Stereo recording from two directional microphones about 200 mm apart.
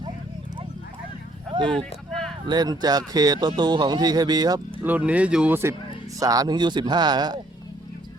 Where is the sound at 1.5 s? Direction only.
25° right (ahead or behind).